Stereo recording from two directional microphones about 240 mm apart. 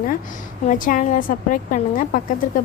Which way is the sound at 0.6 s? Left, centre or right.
Left.